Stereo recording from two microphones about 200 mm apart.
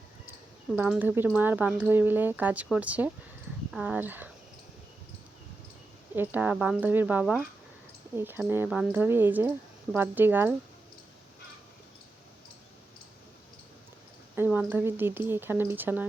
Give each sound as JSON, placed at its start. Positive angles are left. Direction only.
{"t": 0.8, "sound": "speech", "side_deg": -10}
{"t": 6.1, "sound": "speech", "side_deg": -10}
{"t": 14.3, "sound": "speech", "side_deg": -10}